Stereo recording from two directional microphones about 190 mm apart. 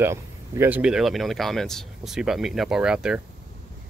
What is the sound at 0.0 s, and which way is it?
Speech, 15° right (ahead or behind).